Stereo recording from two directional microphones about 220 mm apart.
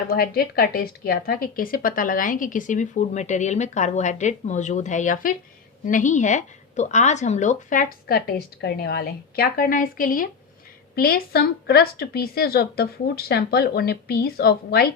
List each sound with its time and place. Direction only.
0.1 s a woman's voice: 45° left (ahead or behind)